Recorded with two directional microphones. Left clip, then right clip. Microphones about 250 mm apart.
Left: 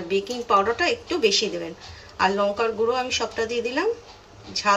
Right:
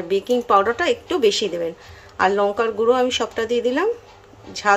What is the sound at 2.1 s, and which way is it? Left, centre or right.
Speech, right.